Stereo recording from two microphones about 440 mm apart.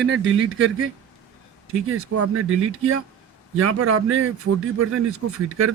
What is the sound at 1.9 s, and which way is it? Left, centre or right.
Speech, right.